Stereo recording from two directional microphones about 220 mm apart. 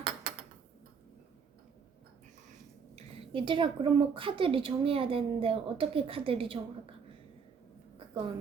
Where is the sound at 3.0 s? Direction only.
20° right (ahead or behind).